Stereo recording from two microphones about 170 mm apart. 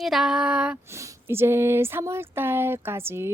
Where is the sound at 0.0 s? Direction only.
Centre (ahead or behind).